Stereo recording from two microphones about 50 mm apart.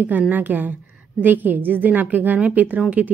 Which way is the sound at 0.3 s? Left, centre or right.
Right.